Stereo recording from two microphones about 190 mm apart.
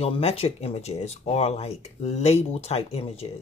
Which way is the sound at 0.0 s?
30° left (ahead or behind).